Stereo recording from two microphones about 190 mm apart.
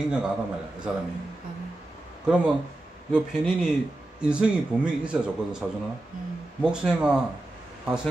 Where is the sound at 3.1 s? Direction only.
5° right (ahead or behind).